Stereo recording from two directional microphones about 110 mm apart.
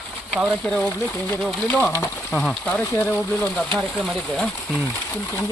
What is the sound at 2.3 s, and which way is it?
Speech, 5° left (ahead or behind).